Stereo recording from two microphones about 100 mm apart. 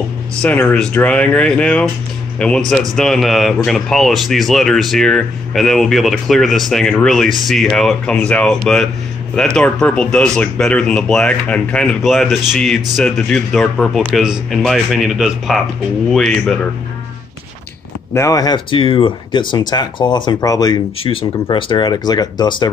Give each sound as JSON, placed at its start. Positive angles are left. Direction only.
{"t": 0.4, "sound": "speech", "side_deg": 15}
{"t": 18.1, "sound": "speech", "side_deg": 35}
{"t": 18.7, "sound": "speech", "side_deg": 60}
{"t": 21.0, "sound": "speech", "side_deg": 65}